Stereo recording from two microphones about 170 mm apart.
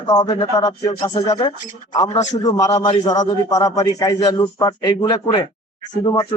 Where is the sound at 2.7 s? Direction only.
35° left (ahead or behind).